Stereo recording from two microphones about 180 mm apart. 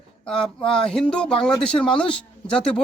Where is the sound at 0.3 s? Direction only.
5° left (ahead or behind).